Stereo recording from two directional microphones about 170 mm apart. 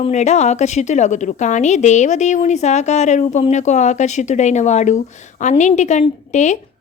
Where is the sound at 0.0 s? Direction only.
40° left (ahead or behind).